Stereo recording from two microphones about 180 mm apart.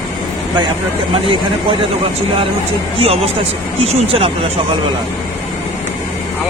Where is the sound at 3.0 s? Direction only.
35° right (ahead or behind).